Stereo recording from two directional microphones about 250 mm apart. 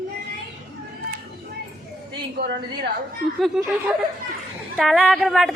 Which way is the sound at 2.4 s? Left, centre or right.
Right.